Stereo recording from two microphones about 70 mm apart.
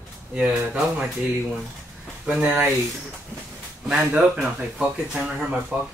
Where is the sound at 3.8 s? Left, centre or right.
Centre.